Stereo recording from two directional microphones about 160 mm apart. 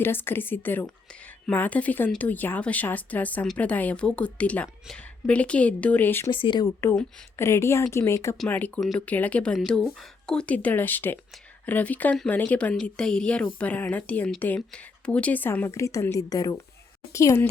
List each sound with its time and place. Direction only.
0.0 s speech: 15° left (ahead or behind)
6.3 s speech: 30° left (ahead or behind)